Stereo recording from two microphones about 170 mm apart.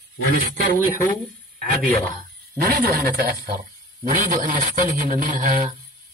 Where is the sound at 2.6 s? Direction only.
60° right (ahead or behind).